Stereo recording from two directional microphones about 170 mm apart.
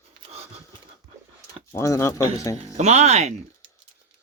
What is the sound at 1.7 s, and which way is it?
Speech, 15° left (ahead or behind).